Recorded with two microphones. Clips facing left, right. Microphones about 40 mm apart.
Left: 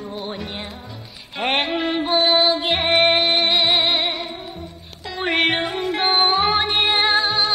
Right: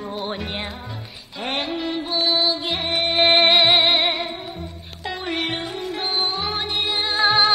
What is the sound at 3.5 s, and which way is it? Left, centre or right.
Music, centre.